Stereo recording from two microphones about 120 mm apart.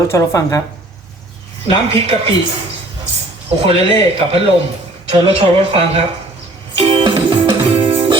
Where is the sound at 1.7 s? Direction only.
55° right (ahead or behind).